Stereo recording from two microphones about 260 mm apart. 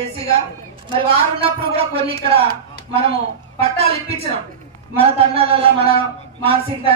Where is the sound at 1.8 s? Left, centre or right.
Right.